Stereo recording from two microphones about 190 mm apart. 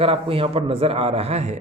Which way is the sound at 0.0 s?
30° right (ahead or behind).